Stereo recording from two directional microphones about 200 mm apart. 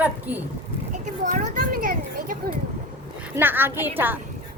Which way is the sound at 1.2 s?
45° right (ahead or behind).